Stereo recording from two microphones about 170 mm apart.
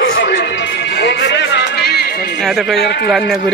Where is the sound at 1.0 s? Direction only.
85° left.